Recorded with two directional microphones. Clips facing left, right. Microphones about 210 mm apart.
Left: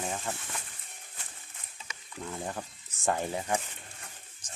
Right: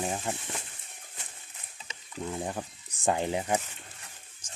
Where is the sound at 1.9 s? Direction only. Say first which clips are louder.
Right 4 dB; 20° right (ahead or behind).